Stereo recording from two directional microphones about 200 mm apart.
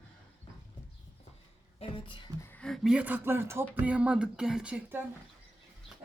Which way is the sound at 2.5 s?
5° left (ahead or behind).